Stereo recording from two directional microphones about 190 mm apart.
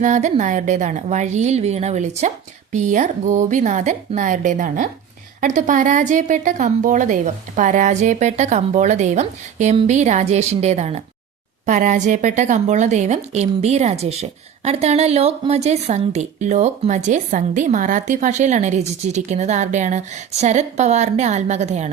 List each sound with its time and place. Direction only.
0.0 s a woman's voice: 40° right (ahead or behind)